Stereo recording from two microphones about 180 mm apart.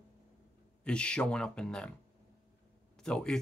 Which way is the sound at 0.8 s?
5° left (ahead or behind).